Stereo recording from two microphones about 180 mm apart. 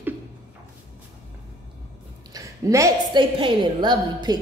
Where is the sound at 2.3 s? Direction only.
15° right (ahead or behind).